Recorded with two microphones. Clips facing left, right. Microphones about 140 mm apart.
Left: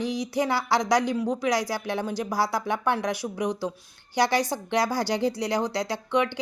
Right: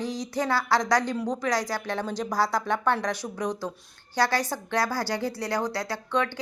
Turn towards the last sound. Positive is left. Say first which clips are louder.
# left 2 dB
turn(degrees=15)  # may be behind; listen again after turning